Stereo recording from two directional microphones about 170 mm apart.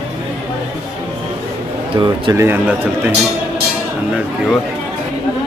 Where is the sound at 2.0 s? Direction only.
25° right (ahead or behind).